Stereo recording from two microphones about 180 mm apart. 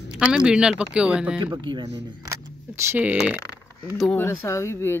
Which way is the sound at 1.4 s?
25° right (ahead or behind).